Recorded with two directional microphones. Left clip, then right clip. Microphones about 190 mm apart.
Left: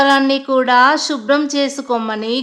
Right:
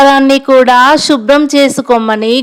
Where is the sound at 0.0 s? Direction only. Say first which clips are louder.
Right 7 dB; 35° right (ahead or behind).